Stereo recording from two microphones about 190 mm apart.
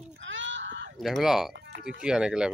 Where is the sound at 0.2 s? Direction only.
75° right (ahead or behind).